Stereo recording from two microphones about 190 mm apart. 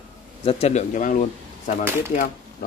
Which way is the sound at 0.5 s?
35° left (ahead or behind).